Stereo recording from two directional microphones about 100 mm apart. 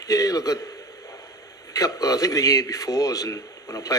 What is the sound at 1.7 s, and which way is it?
A man's voice, 35° left (ahead or behind).